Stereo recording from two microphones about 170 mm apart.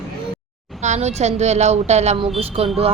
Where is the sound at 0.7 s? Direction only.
45° right (ahead or behind).